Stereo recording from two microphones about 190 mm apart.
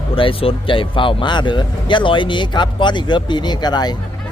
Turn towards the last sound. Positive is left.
turn(degrees=20)  # may be behind; listen again after turning